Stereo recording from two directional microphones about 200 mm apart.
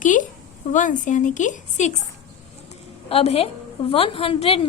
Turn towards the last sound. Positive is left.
turn(degrees=30)  # may be behind; listen again after turning